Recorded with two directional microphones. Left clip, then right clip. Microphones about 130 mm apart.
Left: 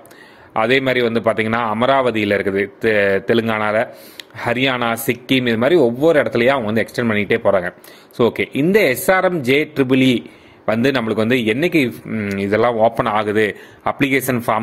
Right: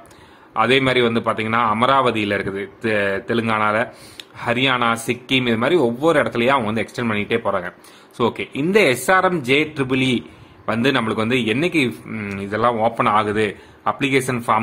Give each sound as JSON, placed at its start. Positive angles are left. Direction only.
{"t": 0.5, "sound": "a man's voice", "side_deg": 40}
{"t": 12.1, "sound": "speech", "side_deg": 20}
{"t": 12.4, "sound": "a man's voice", "side_deg": 45}